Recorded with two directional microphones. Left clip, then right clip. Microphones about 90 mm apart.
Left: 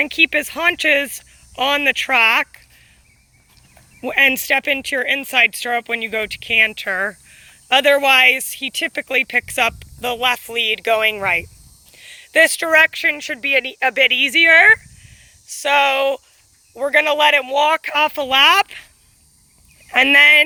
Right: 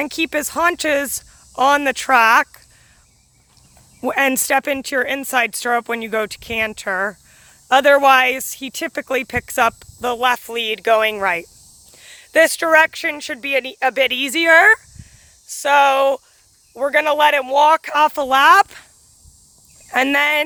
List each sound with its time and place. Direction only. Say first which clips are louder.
0.0 s speech: left 5 dB; 65° right (ahead or behind); by 2.1 s 90° right
4.7 s speech: left 1 dB; 90° right
7.7 s speech: right 2 dB; 90° right
11.9 s speech: even; 90° right; by 14.0 s 45° right (ahead or behind)
14.0 s speech: left 6 dB; 85° right
16.7 s speech: even; 60° right (ahead or behind); by 18.9 s 85° right
19.9 s speech: left 6 dB; 45° right (ahead or behind)